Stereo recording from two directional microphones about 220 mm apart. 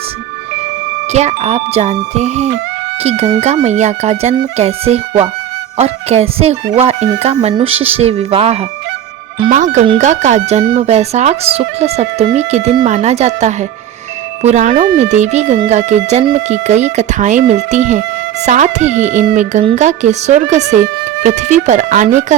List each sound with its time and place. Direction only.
1.1 s speech: 30° right (ahead or behind)
9.7 s speech: 30° right (ahead or behind)